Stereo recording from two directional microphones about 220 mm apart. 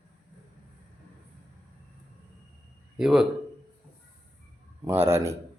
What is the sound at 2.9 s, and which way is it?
Speech, 5° right (ahead or behind).